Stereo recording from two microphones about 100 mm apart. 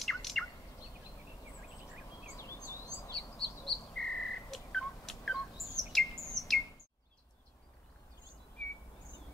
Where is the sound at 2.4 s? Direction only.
30° left (ahead or behind).